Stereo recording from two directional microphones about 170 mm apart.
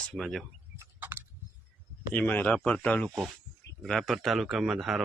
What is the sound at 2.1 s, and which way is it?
Speech, 10° left (ahead or behind).